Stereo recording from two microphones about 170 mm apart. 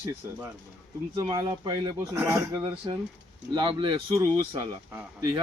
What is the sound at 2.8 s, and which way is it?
Speech, 25° right (ahead or behind).